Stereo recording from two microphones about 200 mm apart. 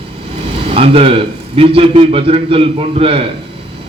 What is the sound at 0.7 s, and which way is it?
A man's voice, 30° right (ahead or behind).